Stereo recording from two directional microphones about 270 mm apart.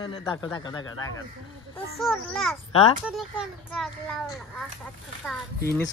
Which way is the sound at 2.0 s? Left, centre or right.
Centre.